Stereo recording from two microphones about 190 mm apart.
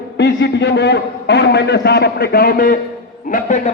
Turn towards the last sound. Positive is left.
turn(degrees=40)  # may be behind; listen again after turning